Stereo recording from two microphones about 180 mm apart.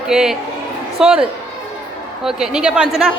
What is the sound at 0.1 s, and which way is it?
A woman's voice, centre (ahead or behind).